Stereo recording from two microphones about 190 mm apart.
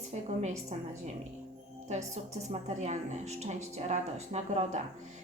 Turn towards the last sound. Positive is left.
turn(degrees=-35)  # may be behind; listen again after turning